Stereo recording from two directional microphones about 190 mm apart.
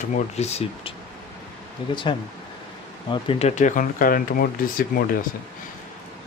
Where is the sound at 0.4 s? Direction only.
35° left (ahead or behind).